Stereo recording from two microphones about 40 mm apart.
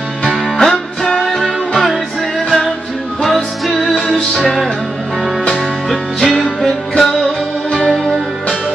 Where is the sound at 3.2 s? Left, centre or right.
Centre.